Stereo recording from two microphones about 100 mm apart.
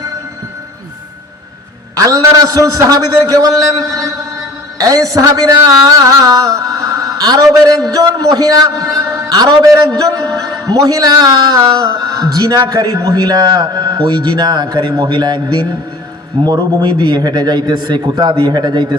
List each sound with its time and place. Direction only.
2.0 s a man's voice: 35° right (ahead or behind)
4.8 s a sound: 35° right (ahead or behind)
7.9 s a man's voice: 35° right (ahead or behind)